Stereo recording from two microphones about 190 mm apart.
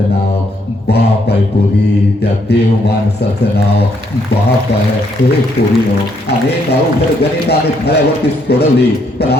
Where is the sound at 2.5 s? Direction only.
60° left (ahead or behind).